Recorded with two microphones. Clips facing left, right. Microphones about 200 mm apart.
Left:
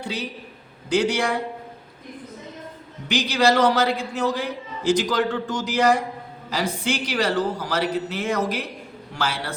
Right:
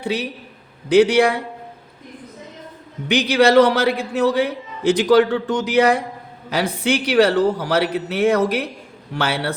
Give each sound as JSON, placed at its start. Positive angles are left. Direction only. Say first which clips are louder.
{"t": 0.0, "sound": "a man's voice", "louder": "right 6 dB", "side_deg": -65}
{"t": 3.1, "sound": "a man's voice", "louder": "right 5 dB", "side_deg": -60}